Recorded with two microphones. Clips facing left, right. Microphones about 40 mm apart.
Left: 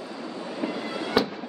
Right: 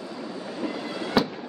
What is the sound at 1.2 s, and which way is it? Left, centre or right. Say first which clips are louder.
Fireworks: right 1 dB; centre.